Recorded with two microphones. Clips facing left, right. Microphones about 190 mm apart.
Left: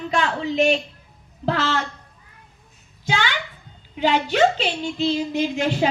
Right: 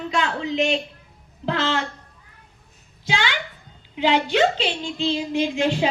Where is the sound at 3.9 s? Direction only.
45° left (ahead or behind).